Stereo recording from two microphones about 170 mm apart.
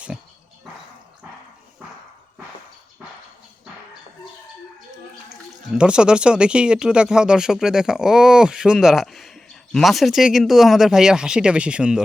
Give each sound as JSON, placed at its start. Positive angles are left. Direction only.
{"t": 5.7, "sound": "speech", "side_deg": -5}